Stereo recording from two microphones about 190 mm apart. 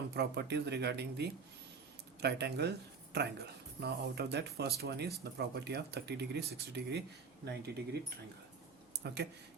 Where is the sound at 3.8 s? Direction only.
60° right (ahead or behind).